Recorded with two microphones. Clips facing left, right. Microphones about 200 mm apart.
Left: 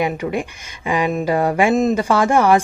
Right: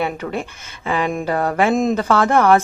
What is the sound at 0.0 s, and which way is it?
Speech, 10° left (ahead or behind).